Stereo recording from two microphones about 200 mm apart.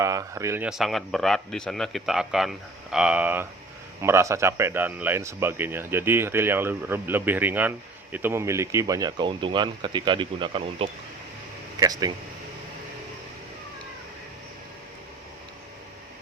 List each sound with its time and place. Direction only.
0.0 s speech: 15° right (ahead or behind)